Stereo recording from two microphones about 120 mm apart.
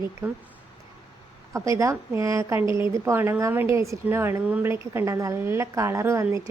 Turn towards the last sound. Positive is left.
turn(degrees=-25)  # may be behind; listen again after turning